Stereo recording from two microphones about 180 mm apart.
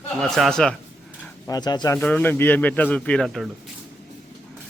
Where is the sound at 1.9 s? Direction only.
10° left (ahead or behind).